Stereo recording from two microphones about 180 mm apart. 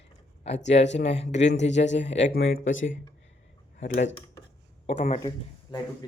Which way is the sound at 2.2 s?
70° left (ahead or behind).